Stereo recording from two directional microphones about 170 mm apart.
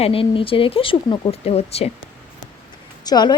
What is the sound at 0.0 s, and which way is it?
Speech, 35° left (ahead or behind).